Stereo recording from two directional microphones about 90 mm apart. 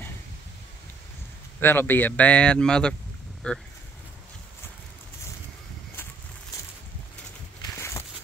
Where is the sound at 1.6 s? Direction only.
25° left (ahead or behind).